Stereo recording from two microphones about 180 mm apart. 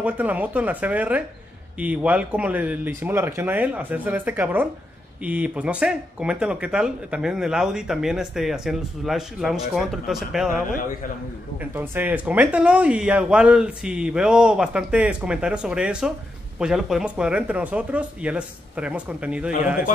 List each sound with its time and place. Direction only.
0.0 s speech: 10° right (ahead or behind)
11.7 s speech: 10° right (ahead or behind)